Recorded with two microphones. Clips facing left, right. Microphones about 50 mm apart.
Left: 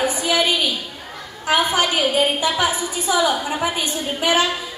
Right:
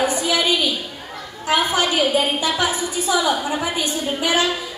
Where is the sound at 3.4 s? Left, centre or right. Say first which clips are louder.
Even; centre.